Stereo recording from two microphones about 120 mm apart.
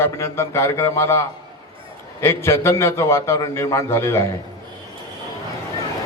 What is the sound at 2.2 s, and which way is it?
A man's voice, 20° left (ahead or behind).